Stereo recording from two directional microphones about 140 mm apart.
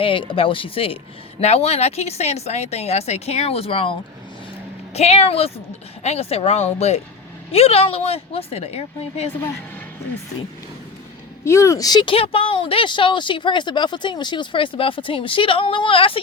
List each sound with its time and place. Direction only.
0.0 s speech: 40° left (ahead or behind)
4.9 s speech: 50° left (ahead or behind)
11.4 s speech: 20° left (ahead or behind); by 16.2 s 40° left (ahead or behind)